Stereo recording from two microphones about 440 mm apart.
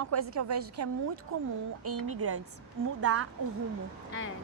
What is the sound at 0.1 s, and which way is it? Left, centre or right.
A woman's voice, right.